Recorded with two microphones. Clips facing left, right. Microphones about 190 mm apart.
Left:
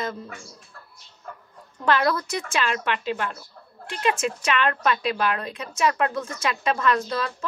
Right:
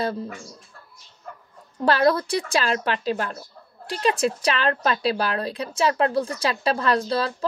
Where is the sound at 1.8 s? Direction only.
35° right (ahead or behind).